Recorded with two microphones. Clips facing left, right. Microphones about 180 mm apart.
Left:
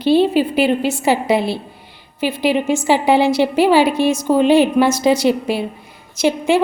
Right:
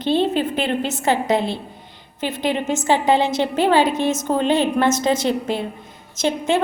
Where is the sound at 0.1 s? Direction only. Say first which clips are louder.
Left 5 dB; 10° left (ahead or behind).